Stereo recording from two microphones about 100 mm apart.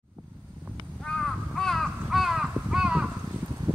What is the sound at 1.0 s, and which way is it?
Crow, 5° left (ahead or behind).